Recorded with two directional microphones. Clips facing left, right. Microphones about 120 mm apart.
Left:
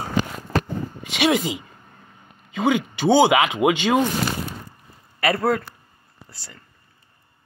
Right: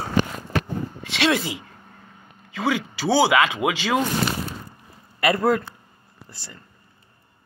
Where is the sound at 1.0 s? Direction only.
15° left (ahead or behind).